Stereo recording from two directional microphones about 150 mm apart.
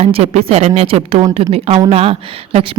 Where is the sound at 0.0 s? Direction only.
45° right (ahead or behind).